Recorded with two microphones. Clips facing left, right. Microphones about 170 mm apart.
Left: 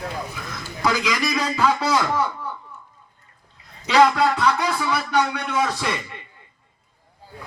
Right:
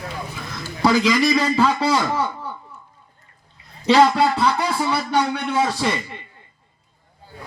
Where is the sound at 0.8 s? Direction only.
30° right (ahead or behind).